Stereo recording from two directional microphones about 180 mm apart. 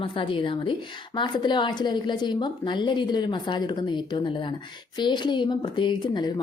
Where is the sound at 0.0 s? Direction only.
30° left (ahead or behind).